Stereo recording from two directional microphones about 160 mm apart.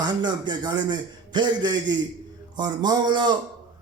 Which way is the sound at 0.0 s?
25° right (ahead or behind).